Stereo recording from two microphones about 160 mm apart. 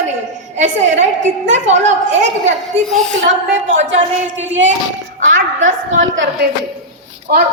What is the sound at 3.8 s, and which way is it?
Speech, 50° right (ahead or behind).